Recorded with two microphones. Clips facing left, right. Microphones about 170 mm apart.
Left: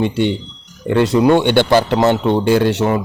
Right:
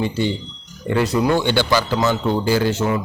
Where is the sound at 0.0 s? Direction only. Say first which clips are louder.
Left 4 dB; 65° left (ahead or behind).